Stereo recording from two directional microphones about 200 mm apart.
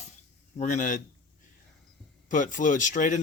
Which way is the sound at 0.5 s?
40° left (ahead or behind).